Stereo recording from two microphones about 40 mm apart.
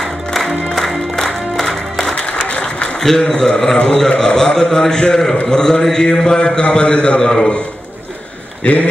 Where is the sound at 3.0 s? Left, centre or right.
Centre.